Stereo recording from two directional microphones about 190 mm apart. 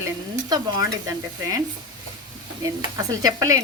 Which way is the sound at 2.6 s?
15° right (ahead or behind).